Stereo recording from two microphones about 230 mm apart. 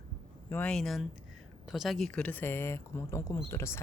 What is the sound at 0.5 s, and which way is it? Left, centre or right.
Speech, centre.